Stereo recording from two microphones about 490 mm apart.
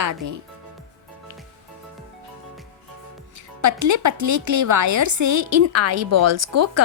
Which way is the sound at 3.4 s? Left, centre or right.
Right.